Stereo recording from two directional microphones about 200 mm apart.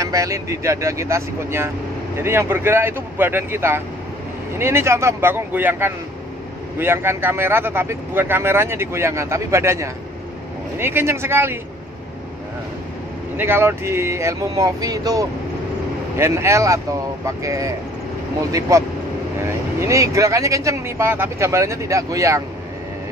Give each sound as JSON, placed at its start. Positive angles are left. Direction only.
{"t": 0.0, "sound": "speech", "side_deg": -15}
{"t": 13.4, "sound": "speech", "side_deg": -10}